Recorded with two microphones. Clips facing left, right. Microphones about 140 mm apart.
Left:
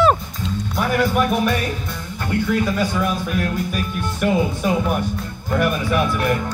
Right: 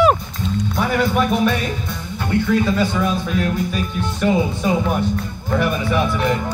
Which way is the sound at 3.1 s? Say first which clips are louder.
Right 2 dB; 20° right (ahead or behind).